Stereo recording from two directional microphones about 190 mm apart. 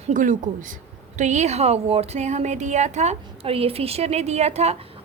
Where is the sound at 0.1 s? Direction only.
40° right (ahead or behind).